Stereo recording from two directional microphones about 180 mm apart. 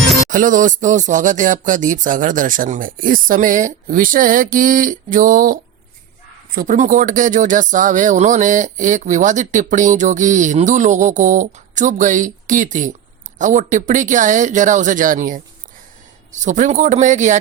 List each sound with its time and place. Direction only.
0.3 s speech: 45° right (ahead or behind)